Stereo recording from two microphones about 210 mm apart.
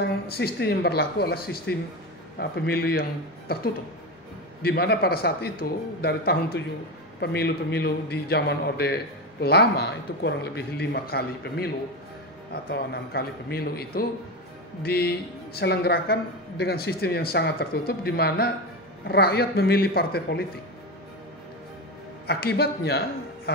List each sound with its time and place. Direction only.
0.0 s a man's voice: 50° left (ahead or behind)
22.2 s a man's voice: 50° left (ahead or behind)